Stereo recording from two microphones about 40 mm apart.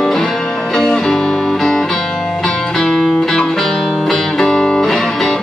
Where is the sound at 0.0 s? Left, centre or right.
Centre.